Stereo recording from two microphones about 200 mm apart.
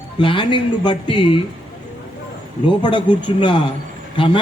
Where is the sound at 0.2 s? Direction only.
25° left (ahead or behind).